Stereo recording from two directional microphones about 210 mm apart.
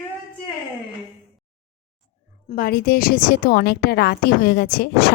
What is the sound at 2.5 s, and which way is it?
A woman's voice, 45° left (ahead or behind).